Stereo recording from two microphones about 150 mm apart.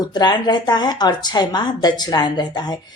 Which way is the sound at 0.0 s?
25° left (ahead or behind).